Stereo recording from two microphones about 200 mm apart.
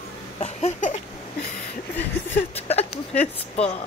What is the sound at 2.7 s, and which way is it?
Speech, 30° left (ahead or behind).